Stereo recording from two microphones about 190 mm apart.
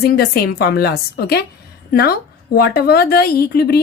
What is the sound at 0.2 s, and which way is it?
Speech, 55° left (ahead or behind).